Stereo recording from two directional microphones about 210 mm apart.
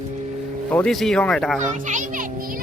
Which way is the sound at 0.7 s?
5° left (ahead or behind).